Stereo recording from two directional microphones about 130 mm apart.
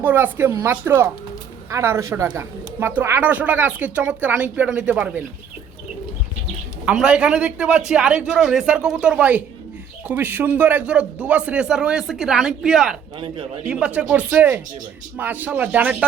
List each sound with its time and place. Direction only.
0.0 s a man's voice: 15° right (ahead or behind)
6.8 s a man's voice: 10° right (ahead or behind)
13.1 s a man's voice: 40° right (ahead or behind)
13.7 s a man's voice: 10° right (ahead or behind)